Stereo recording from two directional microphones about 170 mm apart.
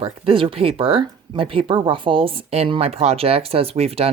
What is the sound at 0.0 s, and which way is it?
Speech, 35° right (ahead or behind).